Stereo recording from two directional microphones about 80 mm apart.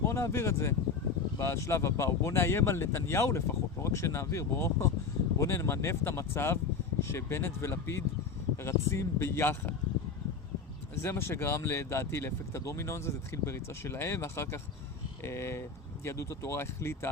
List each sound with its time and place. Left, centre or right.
0.0 s speech: left
11.0 s speech: left